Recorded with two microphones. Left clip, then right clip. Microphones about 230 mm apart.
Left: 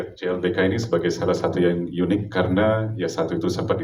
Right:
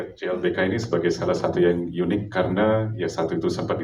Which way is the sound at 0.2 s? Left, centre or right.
Left.